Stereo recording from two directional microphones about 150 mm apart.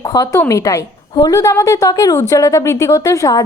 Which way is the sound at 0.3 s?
20° left (ahead or behind).